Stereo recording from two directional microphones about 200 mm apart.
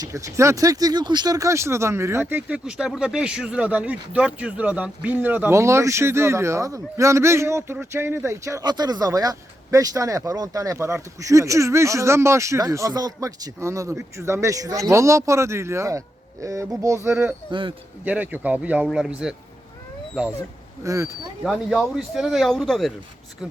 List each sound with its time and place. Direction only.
0.0 s speech: 15° right (ahead or behind)
17.5 s speech: 25° right (ahead or behind)
18.0 s speech: 10° right (ahead or behind)
20.8 s speech: 15° right (ahead or behind)
21.4 s speech: centre (ahead or behind)